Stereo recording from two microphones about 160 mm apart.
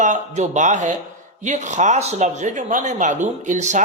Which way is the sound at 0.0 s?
50° right (ahead or behind).